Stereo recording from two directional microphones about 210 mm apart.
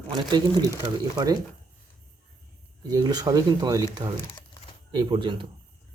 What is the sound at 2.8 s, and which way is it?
Speech, 20° right (ahead or behind).